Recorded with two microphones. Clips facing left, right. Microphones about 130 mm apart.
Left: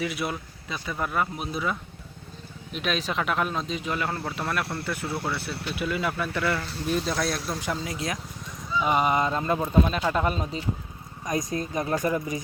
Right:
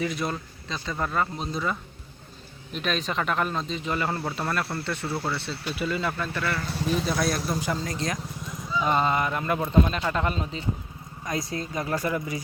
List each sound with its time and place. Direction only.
0.0 s speech: 5° left (ahead or behind)
2.7 s speech: centre (ahead or behind)
7.0 s speech: centre (ahead or behind); by 9.6 s 25° left (ahead or behind)
9.6 s speech: 10° left (ahead or behind); by 12.4 s 25° left (ahead or behind)